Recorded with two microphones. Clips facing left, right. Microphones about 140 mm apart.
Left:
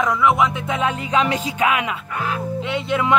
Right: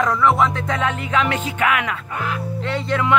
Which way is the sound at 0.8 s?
15° left (ahead or behind).